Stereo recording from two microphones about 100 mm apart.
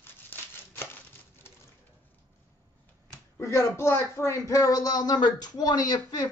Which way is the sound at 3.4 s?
30° left (ahead or behind).